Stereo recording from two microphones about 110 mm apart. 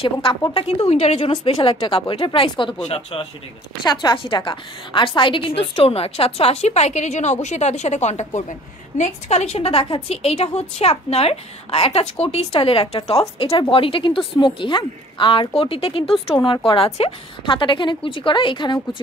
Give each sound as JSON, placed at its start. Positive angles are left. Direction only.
{"t": 0.0, "sound": "speech", "side_deg": 55}
{"t": 0.8, "sound": "speech", "side_deg": 65}
{"t": 3.8, "sound": "a woman's voice", "side_deg": 40}